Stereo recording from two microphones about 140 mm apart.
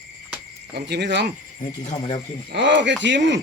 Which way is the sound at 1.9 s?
35° left (ahead or behind).